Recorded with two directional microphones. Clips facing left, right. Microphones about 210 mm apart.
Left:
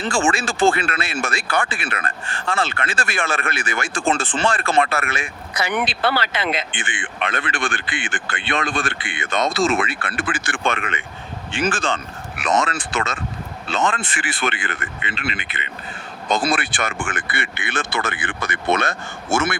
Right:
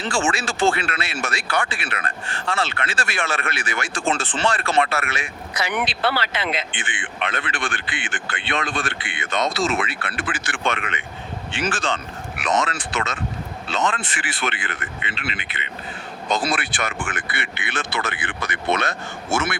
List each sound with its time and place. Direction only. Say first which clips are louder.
0.1 s speech: left 3 dB; 50° left (ahead or behind)